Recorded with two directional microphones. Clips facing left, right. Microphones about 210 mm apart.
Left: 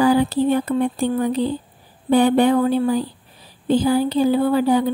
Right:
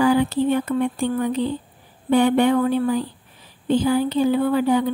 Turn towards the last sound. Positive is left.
turn(degrees=35)  # may be behind; listen again after turning